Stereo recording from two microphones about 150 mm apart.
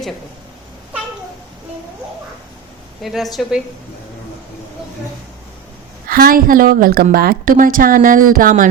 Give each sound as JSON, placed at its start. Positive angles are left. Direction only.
{"t": 3.0, "sound": "a woman's voice", "side_deg": 0}
{"t": 6.1, "sound": "a woman's voice", "side_deg": -80}